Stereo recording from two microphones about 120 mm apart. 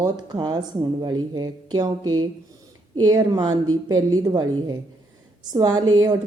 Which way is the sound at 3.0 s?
30° right (ahead or behind).